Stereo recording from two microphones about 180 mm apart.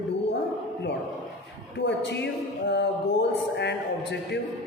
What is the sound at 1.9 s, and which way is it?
A man's voice, 75° left (ahead or behind).